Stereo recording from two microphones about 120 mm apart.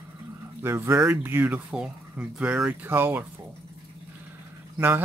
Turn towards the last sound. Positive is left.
turn(degrees=-15)  # may be behind; listen again after turning